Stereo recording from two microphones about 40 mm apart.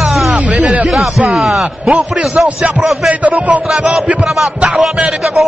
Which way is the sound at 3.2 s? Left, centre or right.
Right.